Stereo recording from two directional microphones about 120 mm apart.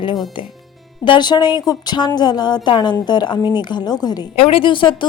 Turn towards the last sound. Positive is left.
turn(degrees=45)  # may be behind; listen again after turning